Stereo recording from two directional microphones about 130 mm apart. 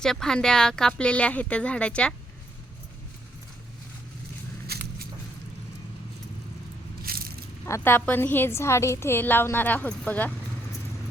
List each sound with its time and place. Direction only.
0.0 s a woman's voice: 5° left (ahead or behind)
7.6 s a woman's voice: 15° left (ahead or behind)